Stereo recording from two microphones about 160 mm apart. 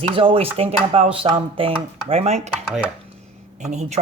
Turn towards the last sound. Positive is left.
turn(degrees=-45)  # may be behind; listen again after turning